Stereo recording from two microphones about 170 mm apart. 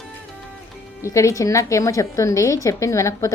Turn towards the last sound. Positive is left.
turn(degrees=15)  # may be behind; listen again after turning